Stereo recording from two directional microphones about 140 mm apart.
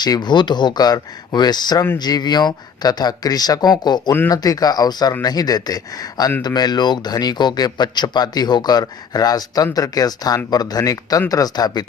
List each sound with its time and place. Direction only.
0.0 s speech: 30° left (ahead or behind)